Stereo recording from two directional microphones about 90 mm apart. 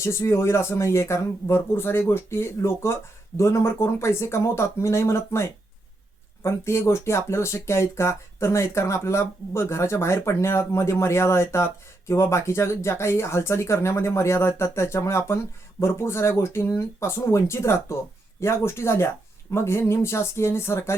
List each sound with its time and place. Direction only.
0.0 s speech: 30° left (ahead or behind)